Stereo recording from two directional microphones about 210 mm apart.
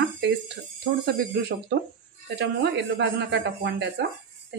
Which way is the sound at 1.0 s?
50° right (ahead or behind).